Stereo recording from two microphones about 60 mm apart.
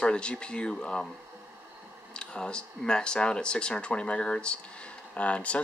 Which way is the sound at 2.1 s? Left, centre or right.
Centre.